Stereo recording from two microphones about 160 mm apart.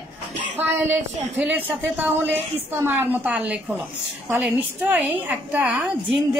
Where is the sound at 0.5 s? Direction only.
10° right (ahead or behind).